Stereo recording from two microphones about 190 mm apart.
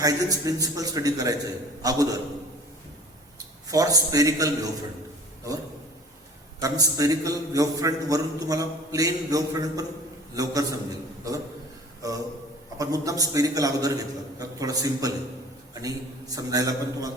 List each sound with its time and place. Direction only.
0.0 s a man's voice: 20° right (ahead or behind)
3.3 s a man's voice: 20° right (ahead or behind)
6.6 s a man's voice: 20° right (ahead or behind)